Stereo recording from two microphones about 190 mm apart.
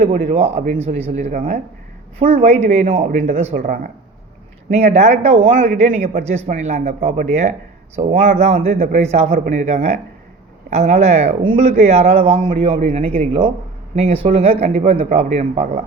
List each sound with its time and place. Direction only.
0.2 s a man's voice: 35° right (ahead or behind)